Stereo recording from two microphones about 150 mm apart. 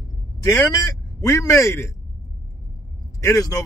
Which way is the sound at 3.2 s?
20° left (ahead or behind).